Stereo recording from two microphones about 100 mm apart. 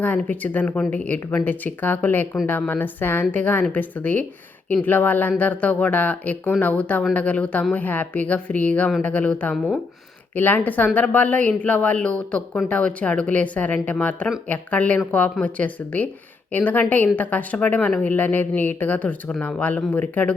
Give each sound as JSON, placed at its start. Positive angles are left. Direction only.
{"t": 0.0, "sound": "a woman's voice", "side_deg": 15}